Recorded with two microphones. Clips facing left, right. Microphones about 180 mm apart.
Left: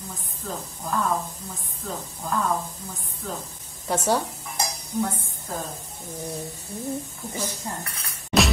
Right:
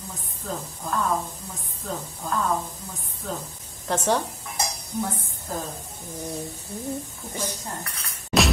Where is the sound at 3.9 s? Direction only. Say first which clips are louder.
Even; 10° left (ahead or behind).